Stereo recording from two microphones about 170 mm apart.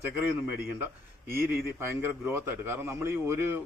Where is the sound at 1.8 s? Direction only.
15° right (ahead or behind).